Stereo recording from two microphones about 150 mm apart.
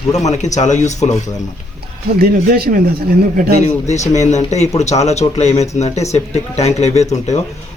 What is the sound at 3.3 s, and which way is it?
Speech, 90° right.